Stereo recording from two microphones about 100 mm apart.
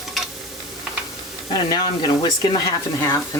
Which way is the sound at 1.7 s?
45° left (ahead or behind).